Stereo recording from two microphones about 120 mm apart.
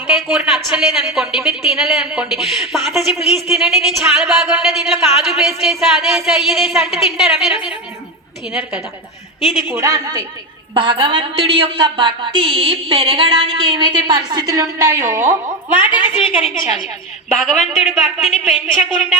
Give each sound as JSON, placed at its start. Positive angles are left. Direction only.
{"t": 0.1, "sound": "a woman's voice", "side_deg": -5}
{"t": 9.6, "sound": "a woman's voice", "side_deg": -25}
{"t": 10.8, "sound": "a woman's voice", "side_deg": -45}
{"t": 17.3, "sound": "a woman's voice", "side_deg": 0}